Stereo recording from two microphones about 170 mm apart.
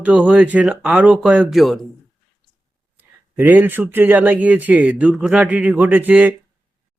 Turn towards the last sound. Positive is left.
turn(degrees=-10)  # may be behind; listen again after turning